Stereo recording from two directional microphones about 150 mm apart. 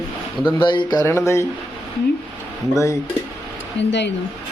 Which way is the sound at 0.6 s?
35° left (ahead or behind).